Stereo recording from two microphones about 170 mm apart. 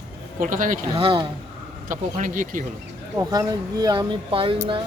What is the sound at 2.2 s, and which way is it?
Speech, 50° right (ahead or behind).